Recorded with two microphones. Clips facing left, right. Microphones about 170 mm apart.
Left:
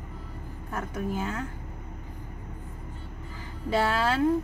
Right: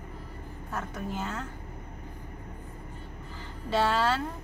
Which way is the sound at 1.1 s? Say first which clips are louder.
Left 3 dB; 10° left (ahead or behind).